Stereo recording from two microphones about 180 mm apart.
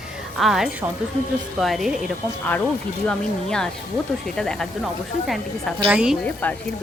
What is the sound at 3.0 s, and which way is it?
A woman's voice, 5° left (ahead or behind).